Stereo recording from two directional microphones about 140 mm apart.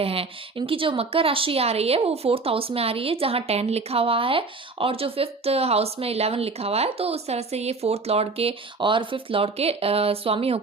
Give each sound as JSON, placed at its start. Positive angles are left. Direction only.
{"t": 0.0, "sound": "speech", "side_deg": -45}